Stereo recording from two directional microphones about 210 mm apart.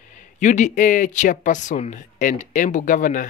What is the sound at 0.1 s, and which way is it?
Speech, 35° left (ahead or behind).